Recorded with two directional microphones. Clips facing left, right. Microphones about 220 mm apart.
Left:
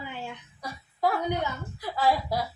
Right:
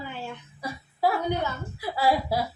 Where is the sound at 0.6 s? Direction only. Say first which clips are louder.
Right 2 dB; 10° right (ahead or behind).